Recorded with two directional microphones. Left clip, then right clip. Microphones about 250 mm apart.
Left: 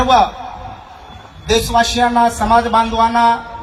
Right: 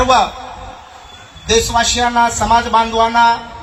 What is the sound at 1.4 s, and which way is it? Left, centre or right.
A man's voice, left.